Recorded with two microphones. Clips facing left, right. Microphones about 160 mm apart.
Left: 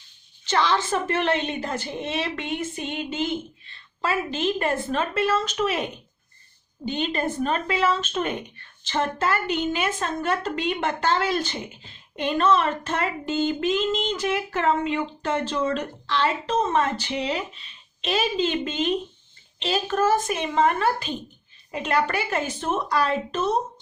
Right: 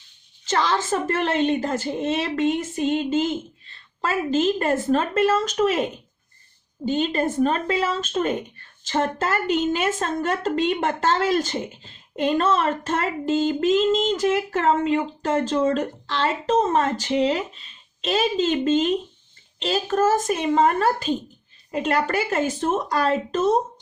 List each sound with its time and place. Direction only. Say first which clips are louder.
0.4 s a woman's voice: even; 45° right (ahead or behind)
6.8 s a woman's voice: right 4 dB; 40° right (ahead or behind)